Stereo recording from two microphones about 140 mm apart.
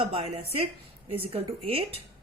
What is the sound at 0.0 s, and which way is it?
Speech, 45° right (ahead or behind).